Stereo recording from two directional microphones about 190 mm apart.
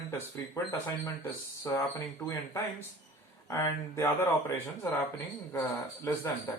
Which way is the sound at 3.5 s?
15° left (ahead or behind).